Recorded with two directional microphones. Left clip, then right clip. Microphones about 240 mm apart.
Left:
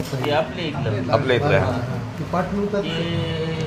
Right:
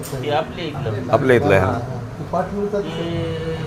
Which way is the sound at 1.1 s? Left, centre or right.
Right.